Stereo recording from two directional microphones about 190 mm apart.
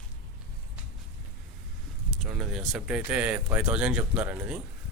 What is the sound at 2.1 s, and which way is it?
Speech, centre (ahead or behind).